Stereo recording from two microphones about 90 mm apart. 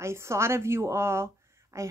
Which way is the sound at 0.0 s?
30° right (ahead or behind).